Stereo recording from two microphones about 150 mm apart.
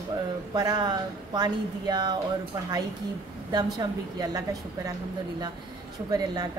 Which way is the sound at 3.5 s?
30° right (ahead or behind).